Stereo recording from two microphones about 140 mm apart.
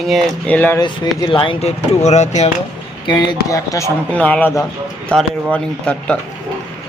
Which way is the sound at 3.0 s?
30° left (ahead or behind).